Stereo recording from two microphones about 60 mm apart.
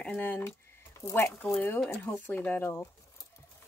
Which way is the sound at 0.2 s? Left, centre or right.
Left.